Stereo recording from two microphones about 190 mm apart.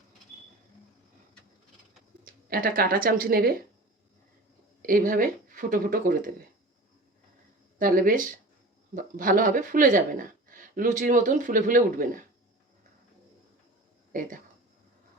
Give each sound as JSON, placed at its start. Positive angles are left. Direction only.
{"t": 2.2, "sound": "speech", "side_deg": -50}
{"t": 4.9, "sound": "speech", "side_deg": -45}
{"t": 7.8, "sound": "speech", "side_deg": -45}
{"t": 14.1, "sound": "speech", "side_deg": -45}